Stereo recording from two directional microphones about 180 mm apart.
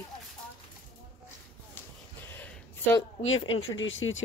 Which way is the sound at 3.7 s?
90° left.